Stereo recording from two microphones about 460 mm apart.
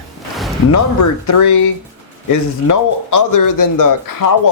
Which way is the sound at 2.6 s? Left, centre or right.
Left.